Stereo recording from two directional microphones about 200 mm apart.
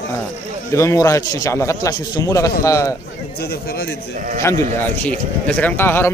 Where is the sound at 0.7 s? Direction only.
15° left (ahead or behind).